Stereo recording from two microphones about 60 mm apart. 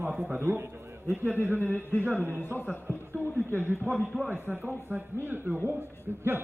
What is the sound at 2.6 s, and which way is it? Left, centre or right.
Speech, left.